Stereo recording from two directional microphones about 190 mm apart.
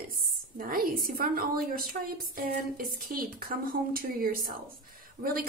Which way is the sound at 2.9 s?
50° right (ahead or behind).